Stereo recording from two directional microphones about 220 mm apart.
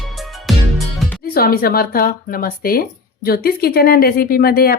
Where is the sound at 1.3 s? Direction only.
45° left (ahead or behind).